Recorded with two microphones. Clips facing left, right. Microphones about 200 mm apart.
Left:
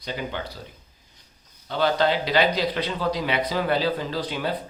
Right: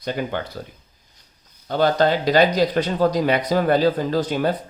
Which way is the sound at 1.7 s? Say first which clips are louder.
Right 4 dB; 45° right (ahead or behind).